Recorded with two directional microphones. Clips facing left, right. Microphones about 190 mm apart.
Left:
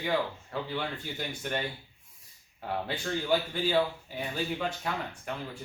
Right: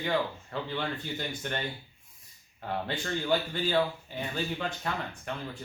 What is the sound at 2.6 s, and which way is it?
Speech, 10° left (ahead or behind).